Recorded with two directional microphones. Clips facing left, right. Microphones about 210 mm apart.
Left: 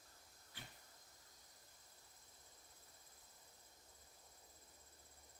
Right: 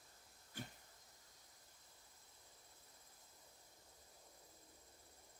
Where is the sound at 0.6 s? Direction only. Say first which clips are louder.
Right 9 dB; 45° right (ahead or behind).